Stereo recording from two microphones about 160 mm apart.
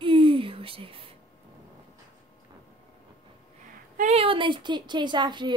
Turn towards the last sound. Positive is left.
turn(degrees=-30)  # may be behind; listen again after turning